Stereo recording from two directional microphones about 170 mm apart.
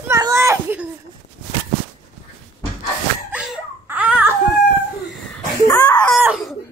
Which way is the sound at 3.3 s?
5° right (ahead or behind).